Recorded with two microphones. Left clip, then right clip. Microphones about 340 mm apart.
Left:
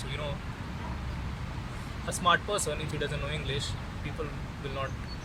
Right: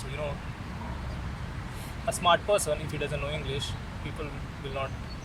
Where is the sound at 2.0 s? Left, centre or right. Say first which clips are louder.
Right 3 dB; centre.